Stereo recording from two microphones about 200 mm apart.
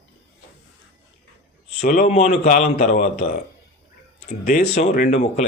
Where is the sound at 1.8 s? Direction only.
45° left (ahead or behind).